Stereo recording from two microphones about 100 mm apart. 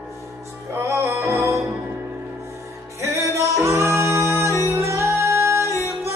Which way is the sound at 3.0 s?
30° right (ahead or behind).